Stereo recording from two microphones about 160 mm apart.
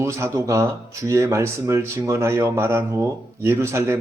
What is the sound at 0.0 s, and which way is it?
Speech, 20° right (ahead or behind).